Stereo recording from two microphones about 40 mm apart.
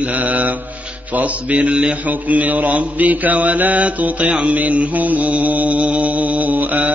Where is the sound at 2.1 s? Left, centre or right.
Right.